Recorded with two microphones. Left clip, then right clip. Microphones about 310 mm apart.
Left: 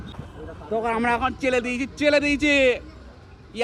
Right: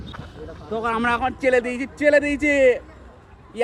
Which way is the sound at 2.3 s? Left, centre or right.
Centre.